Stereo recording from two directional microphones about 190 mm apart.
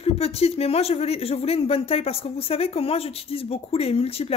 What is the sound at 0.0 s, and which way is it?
Speech, 30° left (ahead or behind).